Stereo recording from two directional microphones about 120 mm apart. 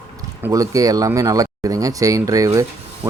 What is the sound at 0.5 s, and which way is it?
Speech, 30° right (ahead or behind).